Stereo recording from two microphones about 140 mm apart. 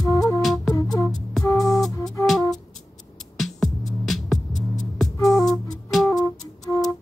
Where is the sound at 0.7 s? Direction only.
20° left (ahead or behind).